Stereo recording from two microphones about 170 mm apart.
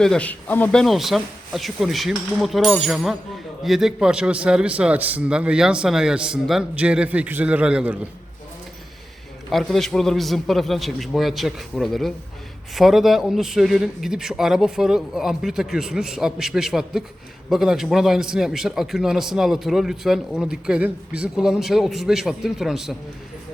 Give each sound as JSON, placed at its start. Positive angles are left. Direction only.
{"t": 0.0, "sound": "a man's voice", "side_deg": 5}
{"t": 9.5, "sound": "a man's voice", "side_deg": 0}